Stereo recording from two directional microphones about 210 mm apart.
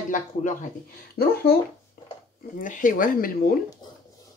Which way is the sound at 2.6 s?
40° left (ahead or behind).